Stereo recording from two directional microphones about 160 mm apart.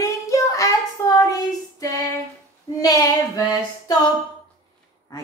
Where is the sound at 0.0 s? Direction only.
20° left (ahead or behind).